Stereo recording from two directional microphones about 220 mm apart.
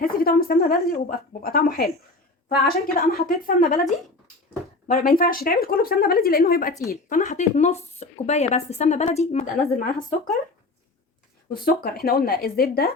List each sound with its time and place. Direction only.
0.0 s speech: 40° left (ahead or behind)
11.6 s speech: 45° left (ahead or behind)